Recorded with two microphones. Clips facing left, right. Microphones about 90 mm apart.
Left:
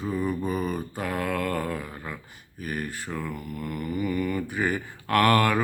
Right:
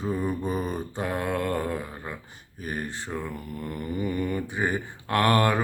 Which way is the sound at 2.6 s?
30° right (ahead or behind).